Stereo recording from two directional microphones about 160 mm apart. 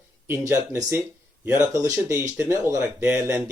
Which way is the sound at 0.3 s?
20° right (ahead or behind).